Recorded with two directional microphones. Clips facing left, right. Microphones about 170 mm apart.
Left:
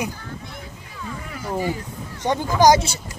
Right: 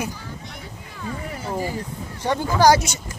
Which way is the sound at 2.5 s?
15° left (ahead or behind).